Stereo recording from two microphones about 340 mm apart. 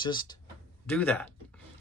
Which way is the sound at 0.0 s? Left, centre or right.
Centre.